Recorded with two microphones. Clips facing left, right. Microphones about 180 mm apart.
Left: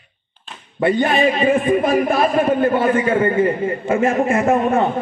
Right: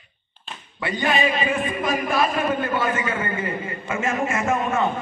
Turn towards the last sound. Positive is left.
turn(degrees=35)  # may be behind; listen again after turning